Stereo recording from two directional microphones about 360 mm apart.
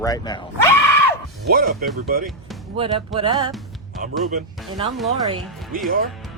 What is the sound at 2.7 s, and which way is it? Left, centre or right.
Music, centre.